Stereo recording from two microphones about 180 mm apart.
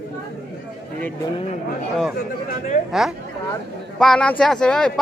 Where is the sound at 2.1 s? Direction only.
50° left (ahead or behind).